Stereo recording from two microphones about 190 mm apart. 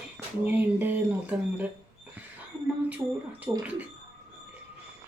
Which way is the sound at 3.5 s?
15° right (ahead or behind).